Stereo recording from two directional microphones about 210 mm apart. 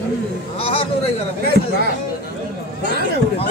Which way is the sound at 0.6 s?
25° left (ahead or behind).